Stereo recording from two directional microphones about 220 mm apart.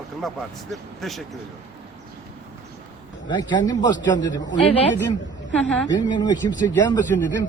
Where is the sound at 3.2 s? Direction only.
20° left (ahead or behind).